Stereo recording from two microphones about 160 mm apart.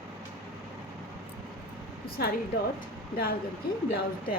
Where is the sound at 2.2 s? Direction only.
75° left (ahead or behind).